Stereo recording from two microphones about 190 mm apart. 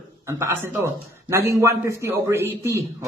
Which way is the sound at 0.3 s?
15° right (ahead or behind).